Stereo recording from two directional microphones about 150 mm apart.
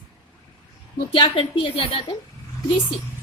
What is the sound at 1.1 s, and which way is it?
A woman's voice, 35° left (ahead or behind).